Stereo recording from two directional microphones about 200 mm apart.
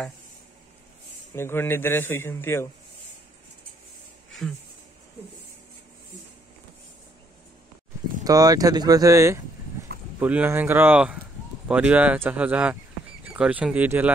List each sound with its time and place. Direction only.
1.3 s a man's voice: 10° left (ahead or behind)
4.3 s a sound: centre (ahead or behind)
8.2 s speech: 20° right (ahead or behind)